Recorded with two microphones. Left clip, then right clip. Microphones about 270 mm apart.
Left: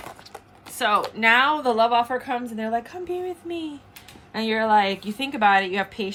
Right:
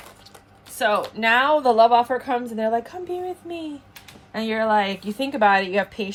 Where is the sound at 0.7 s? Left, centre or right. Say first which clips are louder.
Even; centre.